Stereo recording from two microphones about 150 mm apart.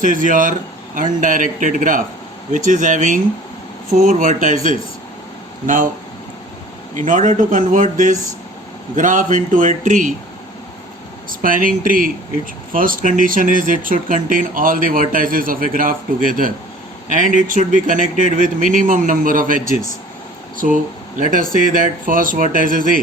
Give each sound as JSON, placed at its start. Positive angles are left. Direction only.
{"t": 0.0, "sound": "speech", "side_deg": -60}
{"t": 5.6, "sound": "speech", "side_deg": -60}
{"t": 6.9, "sound": "speech", "side_deg": -55}
{"t": 11.3, "sound": "speech", "side_deg": -65}
{"t": 21.2, "sound": "speech", "side_deg": -65}